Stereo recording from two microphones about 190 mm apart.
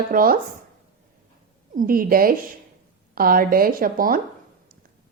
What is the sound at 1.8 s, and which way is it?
Speech, 50° right (ahead or behind).